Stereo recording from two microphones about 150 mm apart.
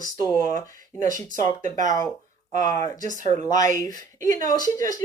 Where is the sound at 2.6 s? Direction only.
25° left (ahead or behind).